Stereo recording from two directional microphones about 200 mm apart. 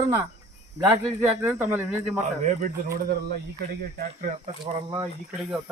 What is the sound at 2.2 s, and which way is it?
Speech, 40° right (ahead or behind).